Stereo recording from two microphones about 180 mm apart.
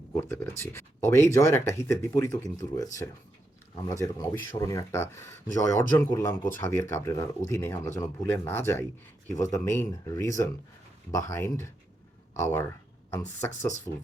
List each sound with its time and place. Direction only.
0.2 s speech: 15° left (ahead or behind)